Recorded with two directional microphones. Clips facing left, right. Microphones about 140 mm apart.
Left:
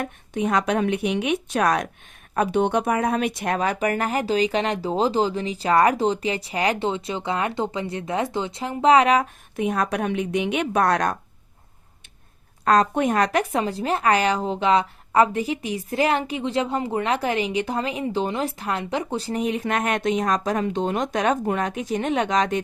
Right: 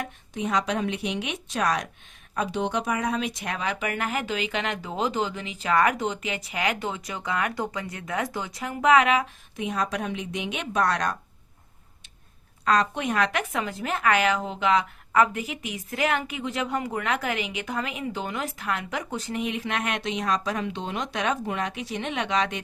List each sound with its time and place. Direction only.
0.0 s speech: 55° left (ahead or behind); by 9.2 s 35° left (ahead or behind)
9.6 s speech: 55° left (ahead or behind)
12.6 s speech: 45° left (ahead or behind)